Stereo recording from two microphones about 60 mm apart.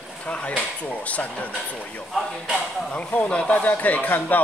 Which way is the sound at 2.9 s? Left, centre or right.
Left.